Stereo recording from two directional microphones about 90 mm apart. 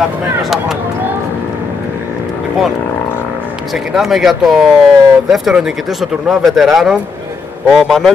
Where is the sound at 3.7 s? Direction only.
5° right (ahead or behind).